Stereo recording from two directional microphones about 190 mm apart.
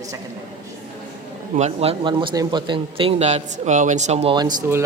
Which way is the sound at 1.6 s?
30° right (ahead or behind).